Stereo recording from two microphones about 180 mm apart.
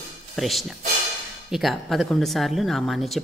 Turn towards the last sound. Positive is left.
turn(degrees=0)  # may be behind; listen again after turning